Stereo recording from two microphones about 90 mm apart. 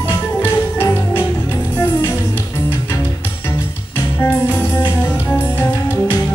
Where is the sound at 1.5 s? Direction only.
25° left (ahead or behind).